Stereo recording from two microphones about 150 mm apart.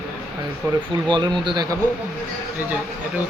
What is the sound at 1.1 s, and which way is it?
Speech, 30° right (ahead or behind).